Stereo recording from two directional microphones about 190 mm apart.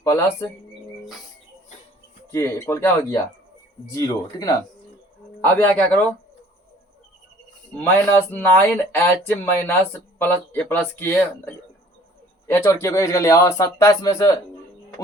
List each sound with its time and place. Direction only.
0.0 s speech: 15° left (ahead or behind)
2.3 s speech: 15° left (ahead or behind)
7.8 s speech: 10° left (ahead or behind)